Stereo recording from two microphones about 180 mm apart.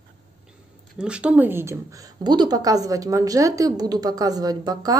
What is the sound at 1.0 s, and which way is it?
A woman's voice, 5° right (ahead or behind).